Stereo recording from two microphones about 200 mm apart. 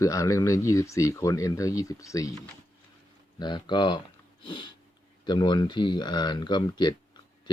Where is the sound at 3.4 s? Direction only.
20° left (ahead or behind).